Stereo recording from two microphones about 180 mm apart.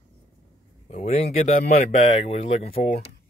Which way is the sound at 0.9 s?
35° left (ahead or behind).